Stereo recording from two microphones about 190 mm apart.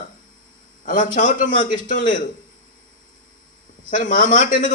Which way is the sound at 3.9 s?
45° left (ahead or behind).